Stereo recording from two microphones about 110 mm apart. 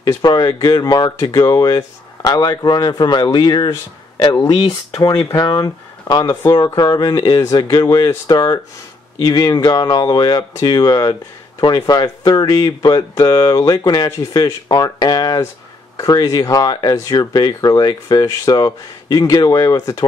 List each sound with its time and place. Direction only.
0.0 s speech: 35° left (ahead or behind)